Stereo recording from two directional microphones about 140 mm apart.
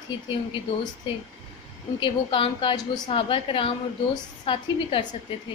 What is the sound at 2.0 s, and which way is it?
A woman's voice, 35° left (ahead or behind).